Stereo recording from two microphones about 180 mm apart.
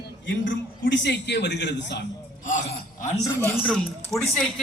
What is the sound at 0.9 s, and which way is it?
A man's voice, 75° left (ahead or behind).